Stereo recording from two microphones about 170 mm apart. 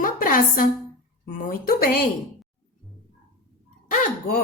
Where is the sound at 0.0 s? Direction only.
55° left (ahead or behind).